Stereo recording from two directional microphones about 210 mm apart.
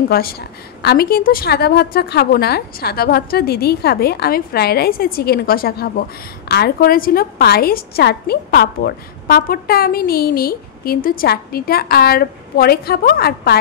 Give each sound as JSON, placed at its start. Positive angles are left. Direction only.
{"t": 0.1, "sound": "a woman's voice", "side_deg": 45}